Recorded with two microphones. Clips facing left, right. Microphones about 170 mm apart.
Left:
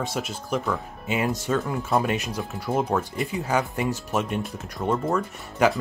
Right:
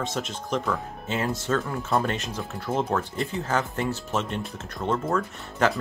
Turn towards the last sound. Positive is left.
turn(degrees=5)  # may be behind; listen again after turning